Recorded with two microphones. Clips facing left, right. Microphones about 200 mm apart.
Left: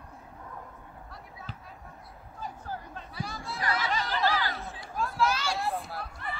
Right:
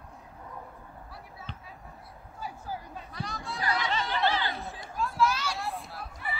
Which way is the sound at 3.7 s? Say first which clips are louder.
Even; centre (ahead or behind).